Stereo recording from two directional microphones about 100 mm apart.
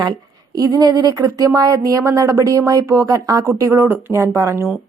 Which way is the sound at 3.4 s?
25° right (ahead or behind).